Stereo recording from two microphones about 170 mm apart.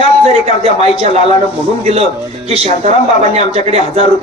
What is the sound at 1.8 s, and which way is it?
A man's voice, 35° right (ahead or behind).